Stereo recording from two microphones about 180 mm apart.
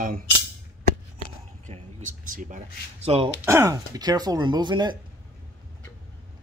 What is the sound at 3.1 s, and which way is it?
Speech, 30° right (ahead or behind).